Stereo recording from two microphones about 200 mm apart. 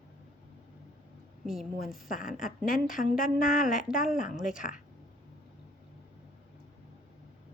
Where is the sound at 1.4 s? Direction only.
Centre (ahead or behind).